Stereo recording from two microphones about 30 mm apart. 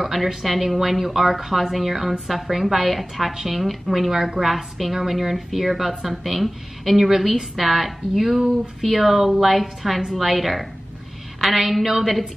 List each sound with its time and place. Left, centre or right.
0.0 s a woman's voice: centre